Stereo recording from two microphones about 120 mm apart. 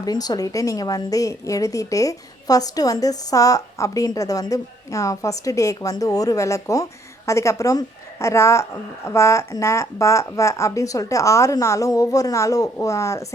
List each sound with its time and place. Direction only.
0.0 s a woman's voice: 35° left (ahead or behind)